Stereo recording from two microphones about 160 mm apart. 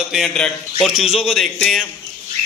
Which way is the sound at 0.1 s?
Centre (ahead or behind).